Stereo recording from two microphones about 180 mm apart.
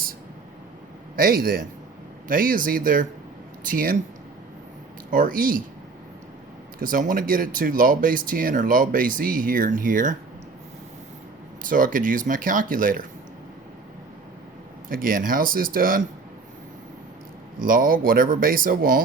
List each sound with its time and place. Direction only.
1.1 s a man's voice: 55° right (ahead or behind)
5.1 s speech: 50° right (ahead or behind)
6.7 s speech: 50° right (ahead or behind)
11.6 s speech: 50° right (ahead or behind)
14.8 s speech: 50° right (ahead or behind)
17.6 s speech: 50° right (ahead or behind)